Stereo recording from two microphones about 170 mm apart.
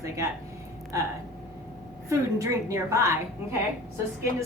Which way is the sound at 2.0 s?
15° right (ahead or behind).